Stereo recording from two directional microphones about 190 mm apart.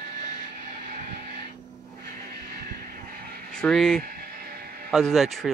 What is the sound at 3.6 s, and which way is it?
Speech, 5° left (ahead or behind).